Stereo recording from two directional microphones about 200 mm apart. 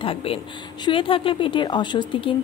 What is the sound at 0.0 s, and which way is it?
A woman's voice, 25° left (ahead or behind).